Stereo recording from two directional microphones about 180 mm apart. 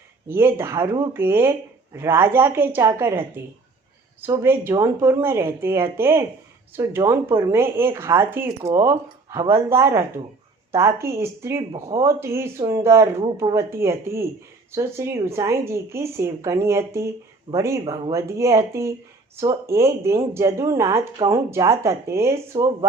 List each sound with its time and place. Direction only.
0.3 s speech: 15° right (ahead or behind)
17.8 s speech: 30° right (ahead or behind)
18.1 s speech: 15° right (ahead or behind)